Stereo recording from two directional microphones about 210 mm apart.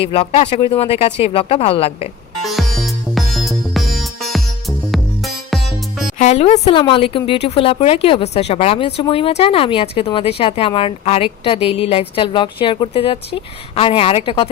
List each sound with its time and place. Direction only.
0.0 s a woman's voice: 25° left (ahead or behind)
2.4 s music: centre (ahead or behind)
6.1 s a woman's voice: 35° left (ahead or behind)